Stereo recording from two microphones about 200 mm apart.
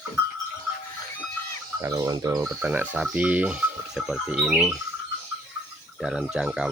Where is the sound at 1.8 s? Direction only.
15° right (ahead or behind).